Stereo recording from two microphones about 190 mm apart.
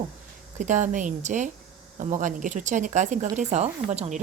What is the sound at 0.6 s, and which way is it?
A woman's voice, 40° right (ahead or behind).